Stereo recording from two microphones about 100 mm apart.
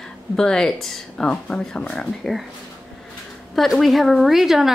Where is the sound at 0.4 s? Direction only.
5° left (ahead or behind).